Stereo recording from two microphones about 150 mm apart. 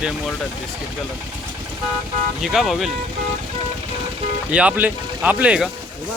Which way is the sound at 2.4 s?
Centre (ahead or behind).